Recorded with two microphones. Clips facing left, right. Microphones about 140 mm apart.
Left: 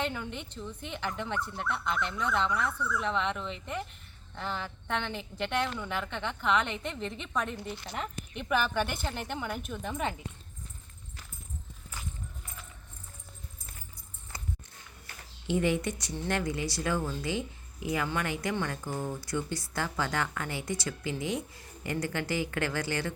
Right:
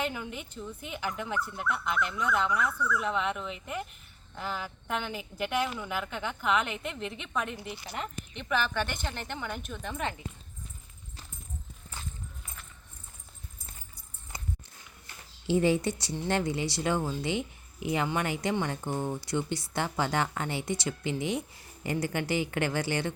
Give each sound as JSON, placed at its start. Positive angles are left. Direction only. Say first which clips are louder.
{"t": 0.0, "sound": "speech", "louder": "even", "side_deg": -10}
{"t": 15.0, "sound": "a sound", "louder": "right 3 dB", "side_deg": -30}
{"t": 16.3, "sound": "a woman's voice", "louder": "right 2 dB", "side_deg": -25}